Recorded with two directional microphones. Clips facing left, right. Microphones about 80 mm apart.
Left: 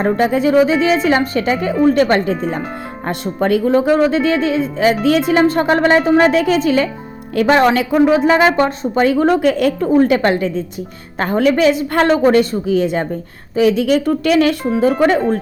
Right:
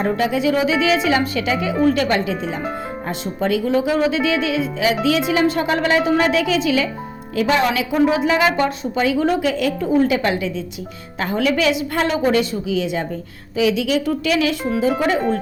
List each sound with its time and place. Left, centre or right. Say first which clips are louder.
0.0 s a woman's voice: left 4 dB; left